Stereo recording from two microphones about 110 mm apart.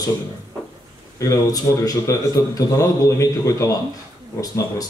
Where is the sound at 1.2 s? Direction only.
30° left (ahead or behind).